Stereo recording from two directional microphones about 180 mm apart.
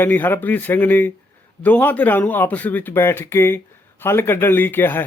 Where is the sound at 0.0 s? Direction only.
10° left (ahead or behind).